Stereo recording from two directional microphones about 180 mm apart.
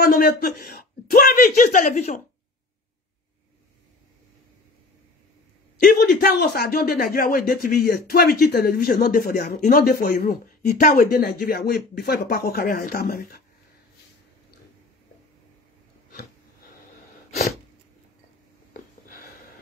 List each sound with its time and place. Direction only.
0.0 s a man's voice: 60° left (ahead or behind); by 2.1 s 45° left (ahead or behind)
5.8 s speech: 55° left (ahead or behind)
18.7 s a sound: 50° left (ahead or behind)